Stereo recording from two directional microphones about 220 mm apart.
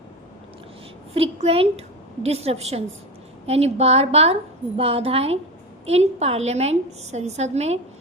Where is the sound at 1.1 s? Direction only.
25° right (ahead or behind).